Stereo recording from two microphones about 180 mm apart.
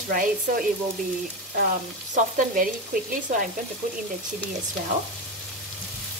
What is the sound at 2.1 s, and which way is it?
A woman's voice, 50° right (ahead or behind).